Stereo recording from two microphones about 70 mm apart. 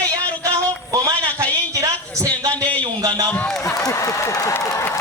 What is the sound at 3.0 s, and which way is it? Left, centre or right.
Speech, right.